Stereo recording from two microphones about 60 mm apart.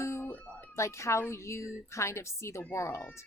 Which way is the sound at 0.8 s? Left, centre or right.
Left.